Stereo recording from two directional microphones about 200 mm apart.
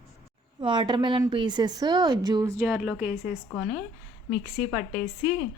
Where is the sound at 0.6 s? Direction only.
20° right (ahead or behind).